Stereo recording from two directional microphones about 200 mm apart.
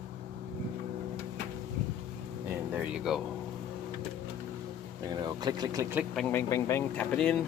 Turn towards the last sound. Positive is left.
turn(degrees=5)  # may be behind; listen again after turning